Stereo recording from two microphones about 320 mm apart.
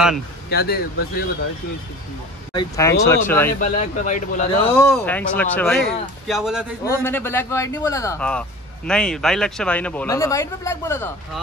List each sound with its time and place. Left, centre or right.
0.5 s speech: left
2.5 s speech: centre
3.6 s speech: left
4.7 s speech: centre